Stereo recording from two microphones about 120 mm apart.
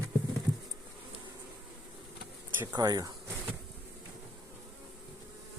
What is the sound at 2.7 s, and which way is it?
Speech, 30° right (ahead or behind).